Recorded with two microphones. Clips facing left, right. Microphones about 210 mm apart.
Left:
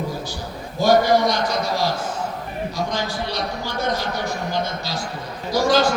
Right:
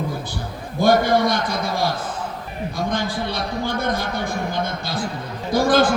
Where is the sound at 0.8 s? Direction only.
55° right (ahead or behind).